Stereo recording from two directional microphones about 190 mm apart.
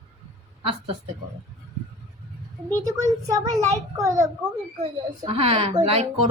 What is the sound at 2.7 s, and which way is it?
Speech, 15° right (ahead or behind).